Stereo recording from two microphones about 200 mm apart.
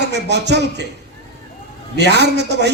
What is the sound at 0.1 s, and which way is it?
Speech, 60° right (ahead or behind).